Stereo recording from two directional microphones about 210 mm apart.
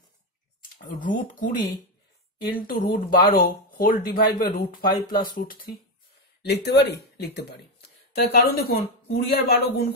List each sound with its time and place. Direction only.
0.7 s speech: 40° left (ahead or behind)
2.5 s speech: 45° left (ahead or behind)
6.4 s speech: 55° left (ahead or behind)